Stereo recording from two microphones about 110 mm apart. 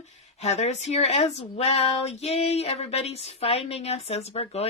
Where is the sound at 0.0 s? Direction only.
90° left.